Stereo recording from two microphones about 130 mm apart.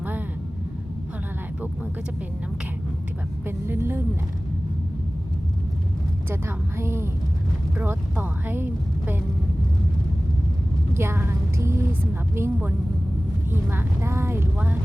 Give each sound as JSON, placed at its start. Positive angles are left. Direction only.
{"t": 3.4, "sound": "speech", "side_deg": -20}
{"t": 6.3, "sound": "a woman's voice", "side_deg": -20}
{"t": 10.9, "sound": "a woman's voice", "side_deg": -20}